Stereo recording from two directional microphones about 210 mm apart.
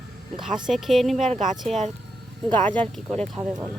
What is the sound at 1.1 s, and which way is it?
Speech, 35° right (ahead or behind).